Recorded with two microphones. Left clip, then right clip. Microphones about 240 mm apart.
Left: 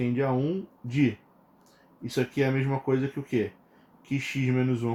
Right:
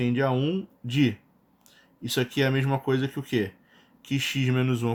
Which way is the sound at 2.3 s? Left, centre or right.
Right.